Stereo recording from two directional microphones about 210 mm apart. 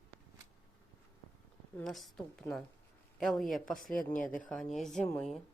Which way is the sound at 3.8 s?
40° left (ahead or behind).